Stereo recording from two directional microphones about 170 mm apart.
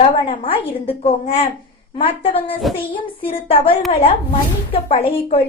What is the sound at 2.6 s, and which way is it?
Child singing, centre (ahead or behind).